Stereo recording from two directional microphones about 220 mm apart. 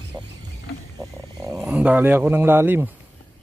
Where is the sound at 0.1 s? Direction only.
15° right (ahead or behind).